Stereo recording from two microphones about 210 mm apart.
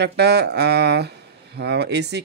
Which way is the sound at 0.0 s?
50° right (ahead or behind).